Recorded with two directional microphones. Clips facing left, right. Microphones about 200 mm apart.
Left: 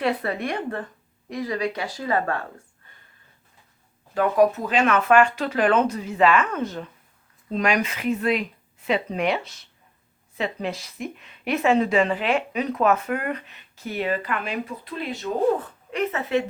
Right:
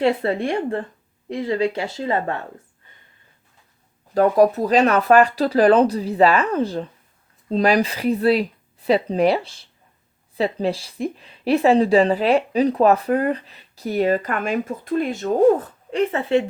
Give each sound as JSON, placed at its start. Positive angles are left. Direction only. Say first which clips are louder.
{"t": 0.0, "sound": "speech", "louder": "right 5 dB", "side_deg": -25}
{"t": 4.1, "sound": "speech", "louder": "right 4 dB", "side_deg": -35}
{"t": 15.9, "sound": "speech", "louder": "right 5 dB", "side_deg": -30}